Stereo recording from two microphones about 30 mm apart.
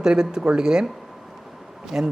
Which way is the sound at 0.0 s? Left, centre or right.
Right.